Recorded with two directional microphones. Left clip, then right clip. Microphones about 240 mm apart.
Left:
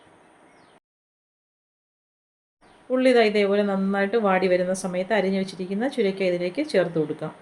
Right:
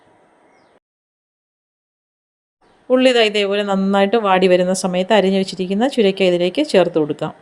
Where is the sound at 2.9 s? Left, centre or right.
Right.